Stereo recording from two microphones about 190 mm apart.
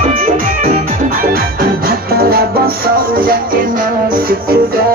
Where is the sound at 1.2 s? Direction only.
50° right (ahead or behind).